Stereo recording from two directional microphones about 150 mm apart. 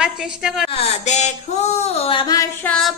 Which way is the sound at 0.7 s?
45° left (ahead or behind).